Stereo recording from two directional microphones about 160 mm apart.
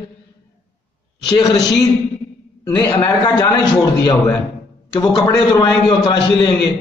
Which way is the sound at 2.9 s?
25° left (ahead or behind).